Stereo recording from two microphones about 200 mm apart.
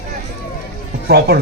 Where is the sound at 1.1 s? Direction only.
50° right (ahead or behind).